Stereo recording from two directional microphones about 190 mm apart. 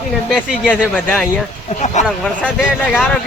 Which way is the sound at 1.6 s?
40° left (ahead or behind).